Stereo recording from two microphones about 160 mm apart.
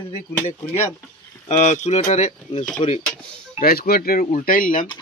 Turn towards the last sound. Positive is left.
turn(degrees=60)  # may be behind; listen again after turning